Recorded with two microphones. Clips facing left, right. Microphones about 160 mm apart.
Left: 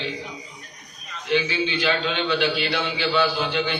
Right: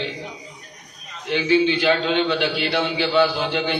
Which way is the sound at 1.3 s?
55° right (ahead or behind).